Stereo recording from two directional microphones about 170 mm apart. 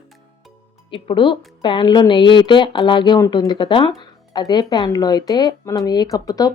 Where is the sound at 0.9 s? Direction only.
30° left (ahead or behind).